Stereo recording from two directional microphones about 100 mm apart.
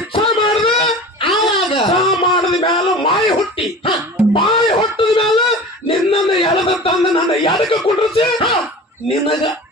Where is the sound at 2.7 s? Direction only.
55° left (ahead or behind).